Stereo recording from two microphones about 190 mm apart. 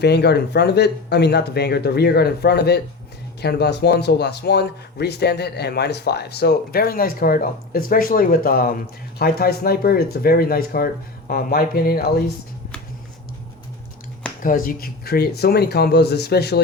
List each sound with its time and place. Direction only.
0.0 s speech: 60° left (ahead or behind)
14.4 s speech: 45° left (ahead or behind)